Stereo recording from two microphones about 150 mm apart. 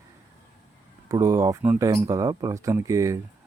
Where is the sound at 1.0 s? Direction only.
25° right (ahead or behind).